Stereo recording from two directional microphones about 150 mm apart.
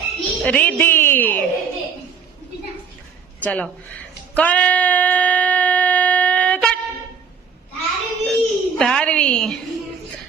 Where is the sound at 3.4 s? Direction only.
10° left (ahead or behind).